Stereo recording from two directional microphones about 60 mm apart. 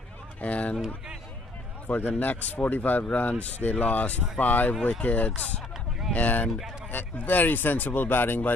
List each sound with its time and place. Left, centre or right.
0.4 s speech: left
1.9 s speech: left